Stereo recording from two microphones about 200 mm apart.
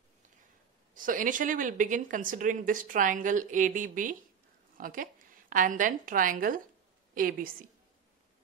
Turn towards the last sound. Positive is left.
turn(degrees=-45)  # may be behind; listen again after turning